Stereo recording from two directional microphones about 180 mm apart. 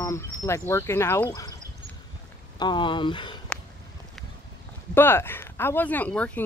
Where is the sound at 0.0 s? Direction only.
15° left (ahead or behind).